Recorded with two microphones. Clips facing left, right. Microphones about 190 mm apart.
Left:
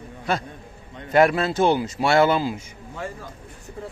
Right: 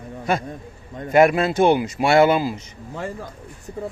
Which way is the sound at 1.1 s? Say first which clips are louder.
Right 3 dB; 10° right (ahead or behind).